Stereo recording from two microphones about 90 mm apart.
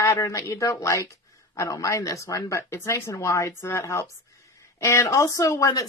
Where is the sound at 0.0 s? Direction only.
35° left (ahead or behind).